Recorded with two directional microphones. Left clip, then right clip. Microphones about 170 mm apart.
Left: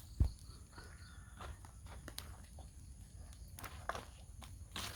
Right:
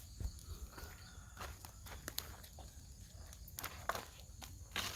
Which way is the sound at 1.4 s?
30° right (ahead or behind).